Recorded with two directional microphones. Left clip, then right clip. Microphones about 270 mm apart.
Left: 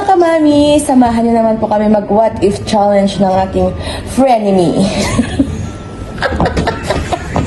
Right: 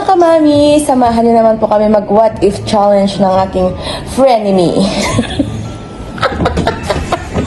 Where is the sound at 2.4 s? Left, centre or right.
Centre.